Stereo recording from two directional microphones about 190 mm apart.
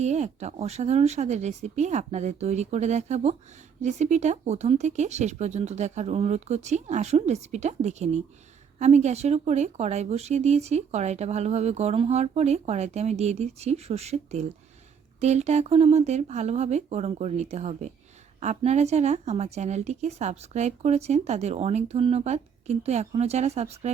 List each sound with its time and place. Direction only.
0.0 s a woman's voice: 35° right (ahead or behind)